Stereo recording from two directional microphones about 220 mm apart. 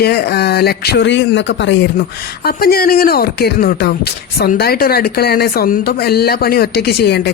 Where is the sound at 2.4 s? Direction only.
45° left (ahead or behind).